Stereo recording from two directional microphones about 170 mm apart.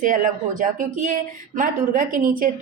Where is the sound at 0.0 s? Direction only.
50° right (ahead or behind).